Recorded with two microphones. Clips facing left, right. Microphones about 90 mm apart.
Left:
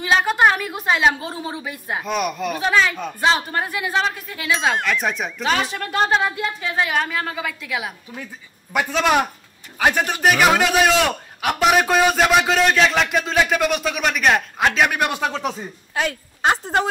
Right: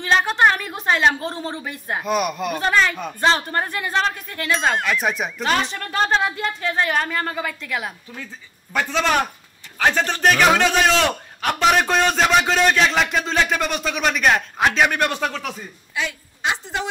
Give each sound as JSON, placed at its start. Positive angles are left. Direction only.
{"t": 0.0, "sound": "a woman's voice", "side_deg": 5}
{"t": 15.9, "sound": "a woman's voice", "side_deg": 45}